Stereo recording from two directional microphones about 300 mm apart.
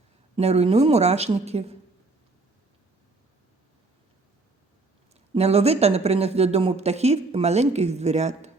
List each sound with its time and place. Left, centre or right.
0.3 s speech: right
5.3 s speech: right